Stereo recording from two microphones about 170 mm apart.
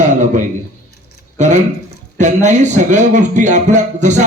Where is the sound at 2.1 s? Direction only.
45° right (ahead or behind).